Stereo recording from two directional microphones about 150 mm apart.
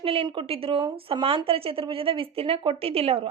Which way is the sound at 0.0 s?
40° right (ahead or behind).